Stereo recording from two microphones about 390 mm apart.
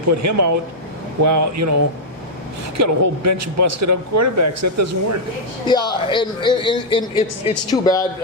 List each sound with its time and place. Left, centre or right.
0.1 s speech: right
2.7 s speech: right
5.6 s a man's voice: centre